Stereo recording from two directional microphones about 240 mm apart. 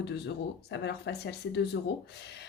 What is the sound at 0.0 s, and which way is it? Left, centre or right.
Speech, left.